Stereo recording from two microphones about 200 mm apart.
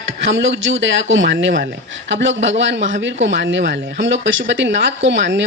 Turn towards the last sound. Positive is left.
turn(degrees=-65)  # may be behind; listen again after turning